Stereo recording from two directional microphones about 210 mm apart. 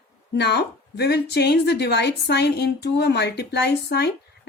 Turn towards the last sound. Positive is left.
turn(degrees=50)  # may be behind; listen again after turning